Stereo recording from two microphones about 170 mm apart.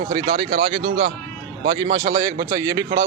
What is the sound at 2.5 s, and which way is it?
Speech, 20° right (ahead or behind).